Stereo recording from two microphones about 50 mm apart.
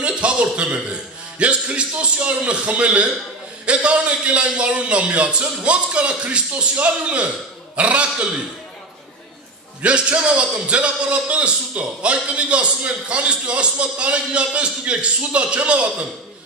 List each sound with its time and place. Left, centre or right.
0.0 s a man's voice: right
9.8 s a man's voice: right